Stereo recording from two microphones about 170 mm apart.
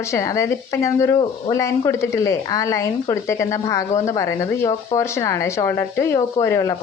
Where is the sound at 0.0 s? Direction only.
15° left (ahead or behind).